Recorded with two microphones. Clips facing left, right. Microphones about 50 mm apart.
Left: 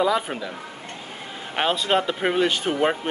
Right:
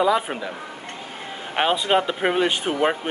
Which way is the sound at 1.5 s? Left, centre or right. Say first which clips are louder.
Right 2 dB; centre.